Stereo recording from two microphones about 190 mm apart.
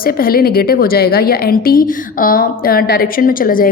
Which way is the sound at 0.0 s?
50° left (ahead or behind).